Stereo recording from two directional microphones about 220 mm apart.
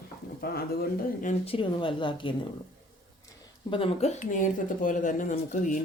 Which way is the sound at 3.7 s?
25° left (ahead or behind).